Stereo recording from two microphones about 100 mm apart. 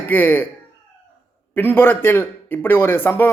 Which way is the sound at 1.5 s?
20° left (ahead or behind).